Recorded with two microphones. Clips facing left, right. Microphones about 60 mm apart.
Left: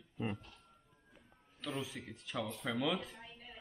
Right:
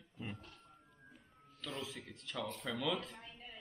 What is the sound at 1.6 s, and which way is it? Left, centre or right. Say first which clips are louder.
Speech: left 3 dB; centre.